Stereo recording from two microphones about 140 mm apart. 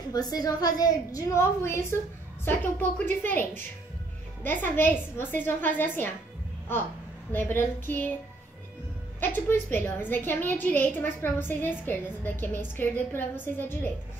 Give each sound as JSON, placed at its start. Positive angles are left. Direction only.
{"t": 0.1, "sound": "a woman's voice", "side_deg": 25}
{"t": 7.3, "sound": "a woman's voice", "side_deg": 15}
{"t": 9.2, "sound": "a woman's voice", "side_deg": 15}